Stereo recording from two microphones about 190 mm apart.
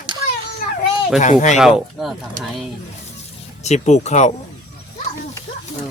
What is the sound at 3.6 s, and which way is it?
Speech, 35° left (ahead or behind).